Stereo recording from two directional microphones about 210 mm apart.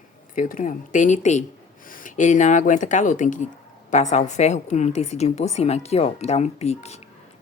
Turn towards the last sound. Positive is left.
turn(degrees=30)  # may be behind; listen again after turning